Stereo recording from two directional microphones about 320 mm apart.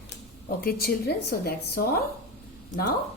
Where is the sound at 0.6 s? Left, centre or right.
Left.